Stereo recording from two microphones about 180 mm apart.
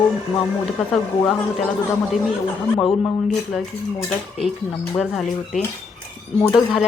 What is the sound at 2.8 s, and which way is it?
Speech, centre (ahead or behind).